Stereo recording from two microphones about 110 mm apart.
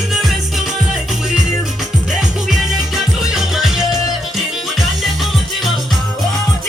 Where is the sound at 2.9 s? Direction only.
Centre (ahead or behind).